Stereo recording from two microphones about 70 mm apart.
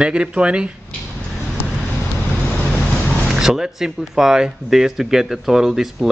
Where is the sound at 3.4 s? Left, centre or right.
Centre.